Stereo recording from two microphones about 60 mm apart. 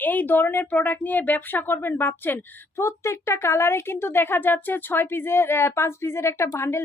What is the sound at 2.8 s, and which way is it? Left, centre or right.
Speech, left.